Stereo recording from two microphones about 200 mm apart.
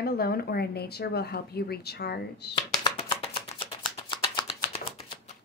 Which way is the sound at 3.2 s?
25° left (ahead or behind).